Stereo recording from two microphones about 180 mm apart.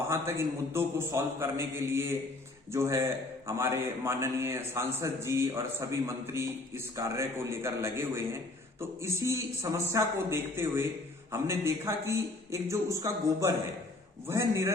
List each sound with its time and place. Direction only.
0.1 s a man's voice: 15° right (ahead or behind)